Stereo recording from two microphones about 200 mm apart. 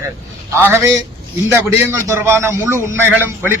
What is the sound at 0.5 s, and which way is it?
A man's voice, 10° right (ahead or behind).